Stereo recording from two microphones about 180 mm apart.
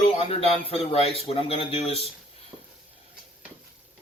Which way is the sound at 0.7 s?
30° left (ahead or behind).